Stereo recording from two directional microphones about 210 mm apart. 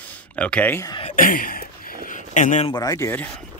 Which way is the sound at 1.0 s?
40° left (ahead or behind).